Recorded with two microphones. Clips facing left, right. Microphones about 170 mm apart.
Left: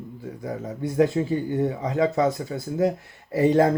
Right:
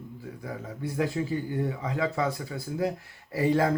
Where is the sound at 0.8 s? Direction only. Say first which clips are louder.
Left 8 dB; 25° left (ahead or behind).